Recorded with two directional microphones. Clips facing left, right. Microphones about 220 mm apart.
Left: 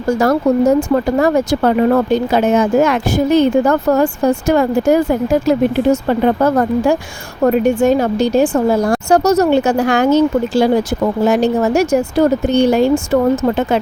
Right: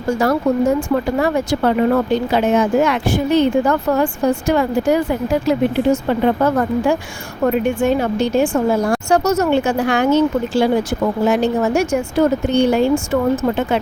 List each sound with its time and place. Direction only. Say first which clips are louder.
0.2 s speech: left 3 dB; 40° left (ahead or behind)